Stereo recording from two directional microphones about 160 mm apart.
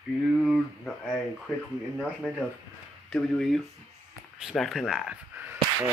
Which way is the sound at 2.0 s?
5° left (ahead or behind).